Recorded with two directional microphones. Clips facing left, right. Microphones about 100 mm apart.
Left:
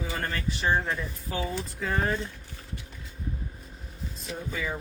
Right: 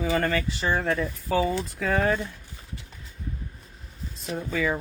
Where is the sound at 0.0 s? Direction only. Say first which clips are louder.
Right 7 dB; 90° right.